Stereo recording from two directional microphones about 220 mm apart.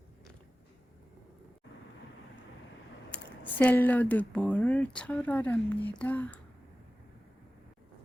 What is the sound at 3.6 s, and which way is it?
Speech, 10° left (ahead or behind).